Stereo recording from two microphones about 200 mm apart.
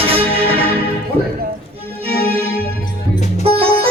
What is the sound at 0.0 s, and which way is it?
Music, 30° right (ahead or behind).